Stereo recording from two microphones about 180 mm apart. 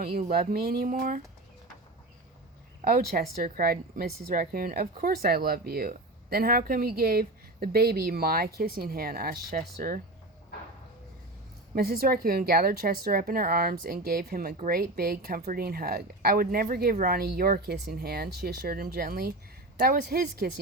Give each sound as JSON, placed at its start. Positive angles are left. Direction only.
{"t": 0.0, "sound": "speech", "side_deg": -55}
{"t": 2.8, "sound": "speech", "side_deg": -50}
{"t": 11.7, "sound": "speech", "side_deg": -55}